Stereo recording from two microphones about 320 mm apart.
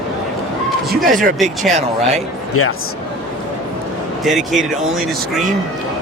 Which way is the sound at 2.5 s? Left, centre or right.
Left.